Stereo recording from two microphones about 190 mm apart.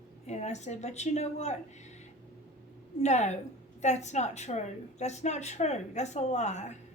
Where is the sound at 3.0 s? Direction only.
35° left (ahead or behind).